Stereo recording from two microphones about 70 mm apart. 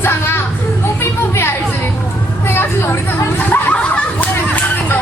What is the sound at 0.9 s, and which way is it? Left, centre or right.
Music, left.